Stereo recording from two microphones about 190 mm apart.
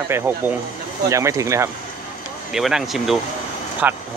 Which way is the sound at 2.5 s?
Centre (ahead or behind).